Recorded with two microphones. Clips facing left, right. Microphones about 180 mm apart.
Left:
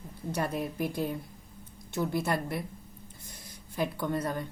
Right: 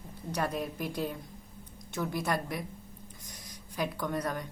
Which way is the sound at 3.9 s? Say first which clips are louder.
Left 2 dB; 25° left (ahead or behind).